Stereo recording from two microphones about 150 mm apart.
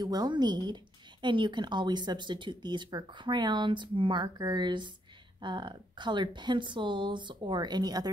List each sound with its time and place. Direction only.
0.0 s speech: 25° right (ahead or behind)